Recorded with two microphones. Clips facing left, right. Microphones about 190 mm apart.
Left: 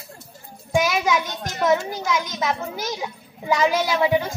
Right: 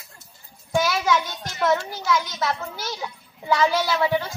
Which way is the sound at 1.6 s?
15° left (ahead or behind).